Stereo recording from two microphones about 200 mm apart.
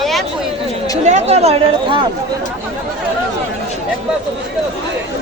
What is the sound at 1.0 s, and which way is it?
Speech, 35° right (ahead or behind).